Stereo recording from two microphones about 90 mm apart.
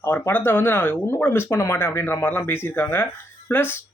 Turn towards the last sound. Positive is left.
turn(degrees=25)  # may be behind; listen again after turning